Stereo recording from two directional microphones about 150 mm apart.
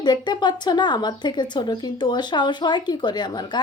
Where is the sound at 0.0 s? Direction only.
30° left (ahead or behind).